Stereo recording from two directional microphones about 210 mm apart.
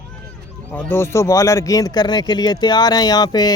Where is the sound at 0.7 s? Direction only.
10° left (ahead or behind).